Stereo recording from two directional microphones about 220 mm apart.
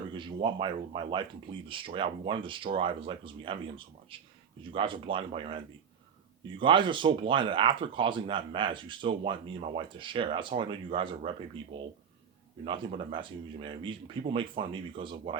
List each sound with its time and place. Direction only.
0.1 s a sound: 20° right (ahead or behind)
0.4 s speech: 20° right (ahead or behind)
12.6 s speech: 20° right (ahead or behind)